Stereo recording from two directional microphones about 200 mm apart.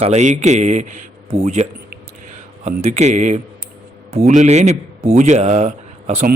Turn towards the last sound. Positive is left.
turn(degrees=-45)  # may be behind; listen again after turning